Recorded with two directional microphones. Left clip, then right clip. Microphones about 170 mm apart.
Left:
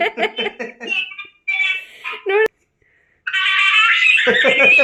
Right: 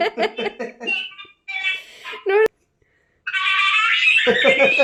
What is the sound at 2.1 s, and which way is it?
Speech, 5° right (ahead or behind).